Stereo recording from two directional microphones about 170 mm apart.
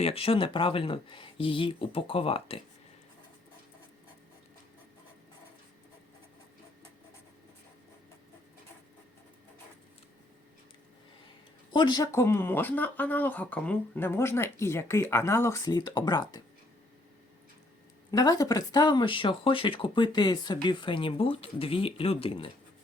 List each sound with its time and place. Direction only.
0.0 s speech: 35° left (ahead or behind)
11.7 s speech: 25° left (ahead or behind)
18.1 s speech: 20° left (ahead or behind)